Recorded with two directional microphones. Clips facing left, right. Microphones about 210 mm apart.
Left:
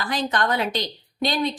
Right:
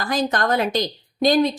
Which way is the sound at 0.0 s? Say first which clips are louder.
Right 3 dB; 45° right (ahead or behind).